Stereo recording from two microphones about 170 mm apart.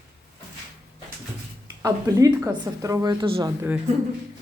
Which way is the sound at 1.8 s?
20° right (ahead or behind).